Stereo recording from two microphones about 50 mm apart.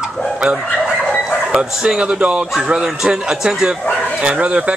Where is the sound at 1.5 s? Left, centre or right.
Centre.